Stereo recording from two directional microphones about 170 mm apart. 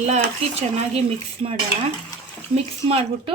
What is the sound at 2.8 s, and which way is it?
Speech, 35° right (ahead or behind).